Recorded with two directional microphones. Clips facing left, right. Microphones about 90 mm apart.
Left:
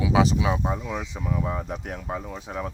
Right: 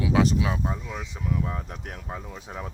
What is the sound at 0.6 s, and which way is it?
Speech, 20° left (ahead or behind).